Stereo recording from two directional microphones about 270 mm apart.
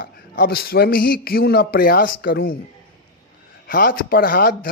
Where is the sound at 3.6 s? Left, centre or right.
Left.